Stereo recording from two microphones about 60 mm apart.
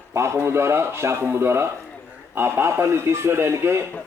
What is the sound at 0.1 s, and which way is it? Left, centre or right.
A man's voice, right.